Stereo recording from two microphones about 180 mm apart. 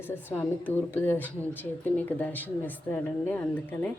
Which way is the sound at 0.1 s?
10° left (ahead or behind).